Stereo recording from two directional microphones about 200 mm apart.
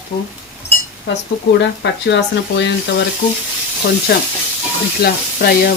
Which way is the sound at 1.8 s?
60° left (ahead or behind).